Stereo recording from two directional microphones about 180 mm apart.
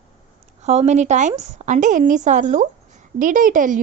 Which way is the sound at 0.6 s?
35° right (ahead or behind).